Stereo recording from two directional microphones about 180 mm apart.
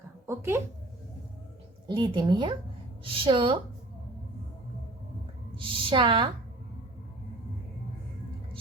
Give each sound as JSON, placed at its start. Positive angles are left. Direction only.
{"t": 0.3, "sound": "speech", "side_deg": -15}
{"t": 1.9, "sound": "a woman's voice", "side_deg": -25}
{"t": 5.5, "sound": "a woman's voice", "side_deg": -30}